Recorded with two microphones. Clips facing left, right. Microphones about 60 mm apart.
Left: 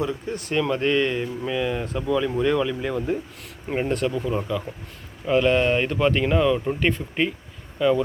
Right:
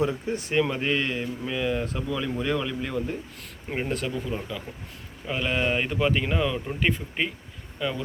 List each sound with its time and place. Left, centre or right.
0.0 s speech: right; by 4.2 s centre
4.2 s speech: centre
5.3 s speech: centre